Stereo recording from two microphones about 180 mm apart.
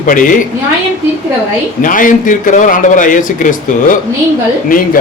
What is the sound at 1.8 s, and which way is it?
A man's voice, 50° left (ahead or behind).